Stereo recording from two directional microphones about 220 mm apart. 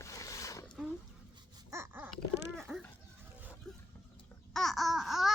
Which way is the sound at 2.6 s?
Centre (ahead or behind).